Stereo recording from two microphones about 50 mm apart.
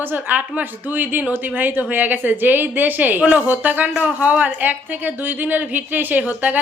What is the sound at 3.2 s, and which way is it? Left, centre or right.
Speech, right.